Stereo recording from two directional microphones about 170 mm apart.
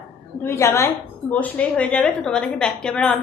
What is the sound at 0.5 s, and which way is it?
A woman's voice, 15° left (ahead or behind).